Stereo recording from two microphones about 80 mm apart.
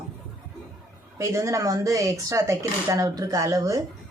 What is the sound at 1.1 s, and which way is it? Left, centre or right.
Speech, right.